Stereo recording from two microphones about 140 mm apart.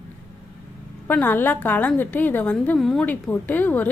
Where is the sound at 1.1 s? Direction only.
15° left (ahead or behind).